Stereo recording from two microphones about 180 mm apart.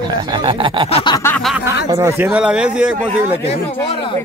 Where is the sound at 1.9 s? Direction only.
15° right (ahead or behind).